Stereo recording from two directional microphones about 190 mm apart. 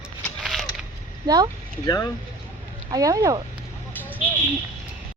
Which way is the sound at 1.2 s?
20° right (ahead or behind).